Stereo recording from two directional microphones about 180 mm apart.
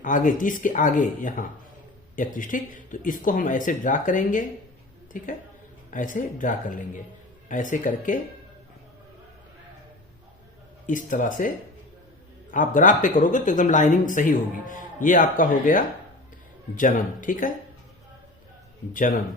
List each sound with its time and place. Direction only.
0.0 s speech: 45° left (ahead or behind)
10.8 s speech: 45° left (ahead or behind)
18.9 s speech: 50° left (ahead or behind)